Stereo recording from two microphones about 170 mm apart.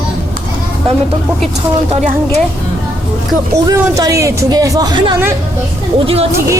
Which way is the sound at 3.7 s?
20° right (ahead or behind).